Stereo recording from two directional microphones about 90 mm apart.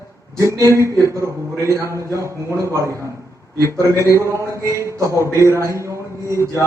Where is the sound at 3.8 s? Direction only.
35° right (ahead or behind).